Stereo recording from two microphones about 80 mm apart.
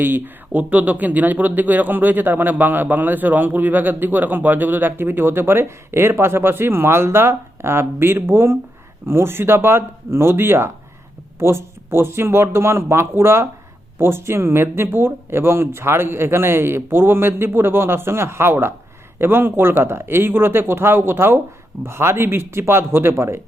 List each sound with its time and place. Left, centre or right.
0.0 s speech: right